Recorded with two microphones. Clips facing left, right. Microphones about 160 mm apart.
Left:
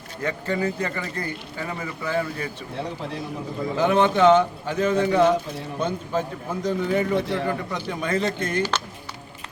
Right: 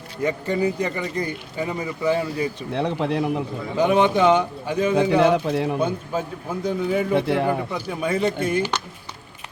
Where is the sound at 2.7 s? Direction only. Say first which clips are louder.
Right 9 dB; 70° right (ahead or behind).